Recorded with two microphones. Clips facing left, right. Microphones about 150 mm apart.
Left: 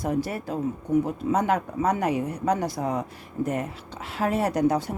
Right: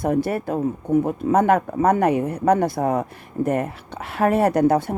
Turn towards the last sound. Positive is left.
turn(degrees=-55)  # may be behind; listen again after turning